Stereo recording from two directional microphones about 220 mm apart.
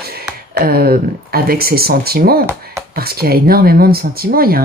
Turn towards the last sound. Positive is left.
turn(degrees=-40)  # may be behind; listen again after turning